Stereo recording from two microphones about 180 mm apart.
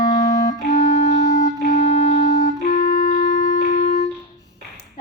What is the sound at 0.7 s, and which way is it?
Music, 45° left (ahead or behind).